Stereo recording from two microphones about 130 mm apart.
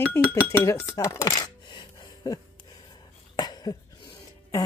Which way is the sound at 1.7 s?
35° left (ahead or behind).